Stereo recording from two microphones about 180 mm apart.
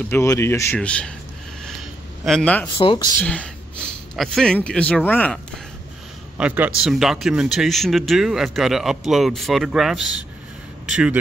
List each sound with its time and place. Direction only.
0.1 s speech: 15° left (ahead or behind)
2.2 s speech: 5° left (ahead or behind)
2.8 s speech: 30° left (ahead or behind)
3.2 s speech: 5° left (ahead or behind)
6.3 s a man's voice: 10° right (ahead or behind)